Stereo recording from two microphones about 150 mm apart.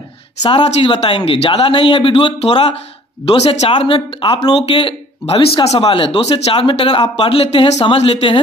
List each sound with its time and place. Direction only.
0.4 s speech: 30° left (ahead or behind)